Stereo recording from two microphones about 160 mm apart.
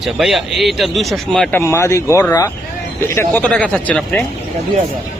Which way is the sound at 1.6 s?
15° left (ahead or behind).